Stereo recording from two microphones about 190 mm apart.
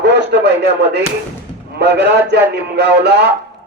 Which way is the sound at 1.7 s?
65° right (ahead or behind).